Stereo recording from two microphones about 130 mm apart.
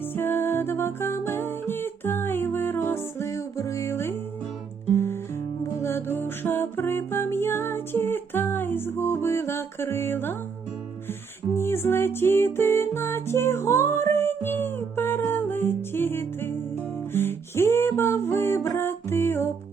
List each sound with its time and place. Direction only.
0.0 s music: 15° left (ahead or behind)
5.8 s music: 20° left (ahead or behind)
11.5 s music: 20° left (ahead or behind)